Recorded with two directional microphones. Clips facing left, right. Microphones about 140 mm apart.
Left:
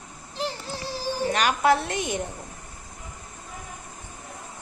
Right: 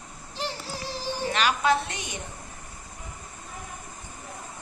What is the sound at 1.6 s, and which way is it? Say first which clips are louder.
Speech: left 3 dB; 65° left (ahead or behind).